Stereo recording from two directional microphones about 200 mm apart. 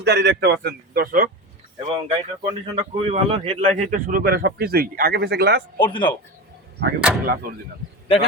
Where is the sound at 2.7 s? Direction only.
30° right (ahead or behind); by 5.7 s 55° right (ahead or behind).